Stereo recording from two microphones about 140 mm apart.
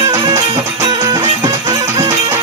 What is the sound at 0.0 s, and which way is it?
Music, 20° right (ahead or behind).